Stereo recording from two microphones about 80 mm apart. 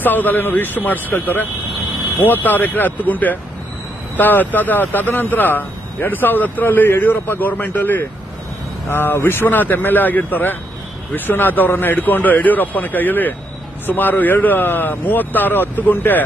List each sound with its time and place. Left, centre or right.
0.0 s speech: left